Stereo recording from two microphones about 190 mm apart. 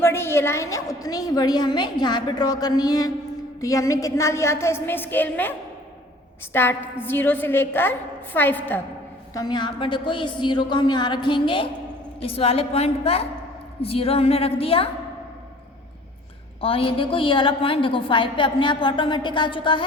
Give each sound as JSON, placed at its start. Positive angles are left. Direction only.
{"t": 0.0, "sound": "a woman's voice", "side_deg": 15}
{"t": 9.3, "sound": "a woman's voice", "side_deg": 20}
{"t": 16.6, "sound": "a woman's voice", "side_deg": 30}